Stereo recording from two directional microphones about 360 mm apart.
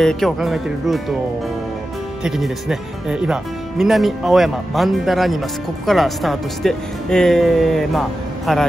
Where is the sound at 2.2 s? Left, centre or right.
Centre.